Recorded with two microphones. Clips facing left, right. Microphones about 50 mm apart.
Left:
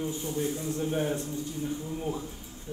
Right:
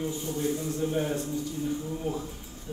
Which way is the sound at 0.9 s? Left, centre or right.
Left.